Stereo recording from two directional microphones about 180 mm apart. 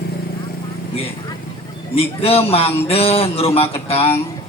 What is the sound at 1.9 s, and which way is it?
A man's voice, 35° left (ahead or behind).